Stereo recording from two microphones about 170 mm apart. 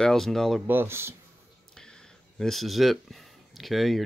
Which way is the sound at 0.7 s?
15° right (ahead or behind).